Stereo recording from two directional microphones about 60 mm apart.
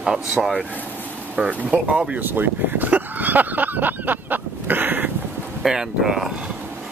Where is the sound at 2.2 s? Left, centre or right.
Right.